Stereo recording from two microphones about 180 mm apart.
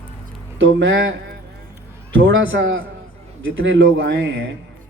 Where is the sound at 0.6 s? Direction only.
90° right.